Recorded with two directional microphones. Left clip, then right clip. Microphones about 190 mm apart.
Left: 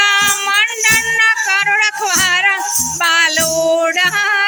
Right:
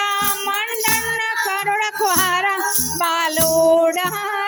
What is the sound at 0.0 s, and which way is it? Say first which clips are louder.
Music: left 8 dB; 20° right (ahead or behind).